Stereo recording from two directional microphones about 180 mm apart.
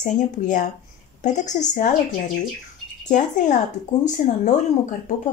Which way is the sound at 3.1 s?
45° left (ahead or behind).